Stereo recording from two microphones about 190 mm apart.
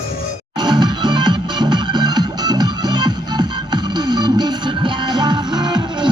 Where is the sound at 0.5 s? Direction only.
20° right (ahead or behind).